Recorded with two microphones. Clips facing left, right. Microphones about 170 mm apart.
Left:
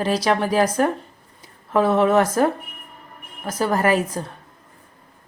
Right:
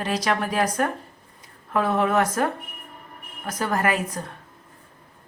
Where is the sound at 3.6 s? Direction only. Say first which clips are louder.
Left 5 dB; 35° left (ahead or behind).